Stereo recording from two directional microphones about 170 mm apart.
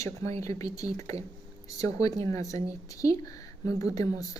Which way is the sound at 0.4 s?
20° left (ahead or behind).